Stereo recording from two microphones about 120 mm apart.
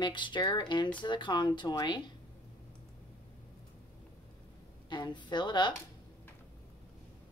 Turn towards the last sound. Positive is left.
turn(degrees=40)  # may be behind; listen again after turning